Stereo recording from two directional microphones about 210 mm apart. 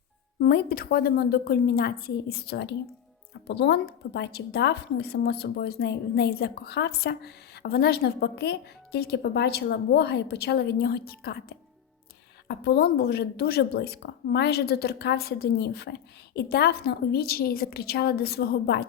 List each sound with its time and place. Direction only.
0.3 s a woman's voice: 45° left (ahead or behind)